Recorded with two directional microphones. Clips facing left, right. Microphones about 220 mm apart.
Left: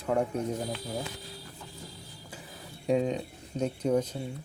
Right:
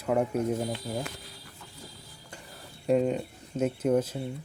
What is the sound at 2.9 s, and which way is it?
Speech, 5° right (ahead or behind).